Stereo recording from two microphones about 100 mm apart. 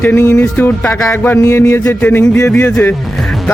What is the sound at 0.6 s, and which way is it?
Music, 20° left (ahead or behind).